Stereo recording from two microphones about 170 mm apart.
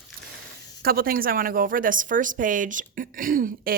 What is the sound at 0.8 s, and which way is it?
A woman's voice, 60° right (ahead or behind).